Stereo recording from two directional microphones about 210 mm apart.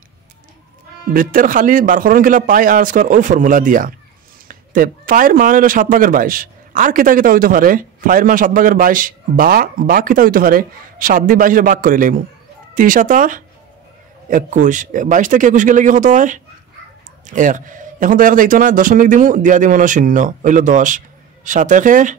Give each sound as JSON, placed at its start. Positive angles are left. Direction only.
{"t": 1.1, "sound": "speech", "side_deg": -40}